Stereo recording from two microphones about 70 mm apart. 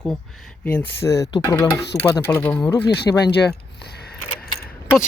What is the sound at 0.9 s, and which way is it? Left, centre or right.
Speech, left.